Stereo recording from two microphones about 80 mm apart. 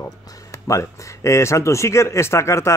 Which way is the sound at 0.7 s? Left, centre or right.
Left.